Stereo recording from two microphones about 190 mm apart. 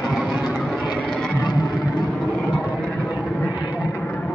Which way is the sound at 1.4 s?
25° left (ahead or behind).